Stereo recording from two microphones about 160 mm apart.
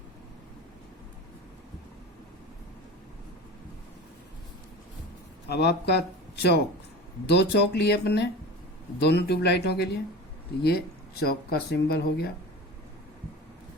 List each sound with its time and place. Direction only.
5.5 s speech: 90° left
10.6 s speech: 75° left (ahead or behind)